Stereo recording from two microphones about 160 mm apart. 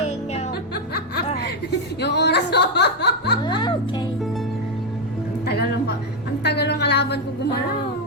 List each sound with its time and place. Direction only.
2.0 s speech: 90° left
3.4 s music: 30° left (ahead or behind)
5.5 s music: 90° left
6.4 s a sound: 90° left